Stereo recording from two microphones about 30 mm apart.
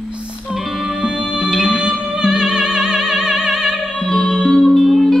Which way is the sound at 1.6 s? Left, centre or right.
Right.